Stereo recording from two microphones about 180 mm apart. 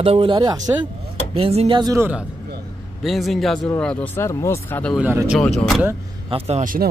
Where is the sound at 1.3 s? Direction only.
35° right (ahead or behind).